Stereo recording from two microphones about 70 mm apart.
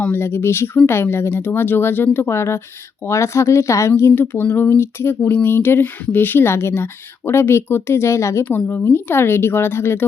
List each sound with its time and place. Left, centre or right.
0.1 s speech: left
8.4 s speech: left